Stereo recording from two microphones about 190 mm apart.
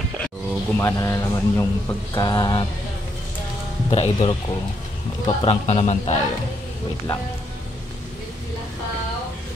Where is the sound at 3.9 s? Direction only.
30° left (ahead or behind).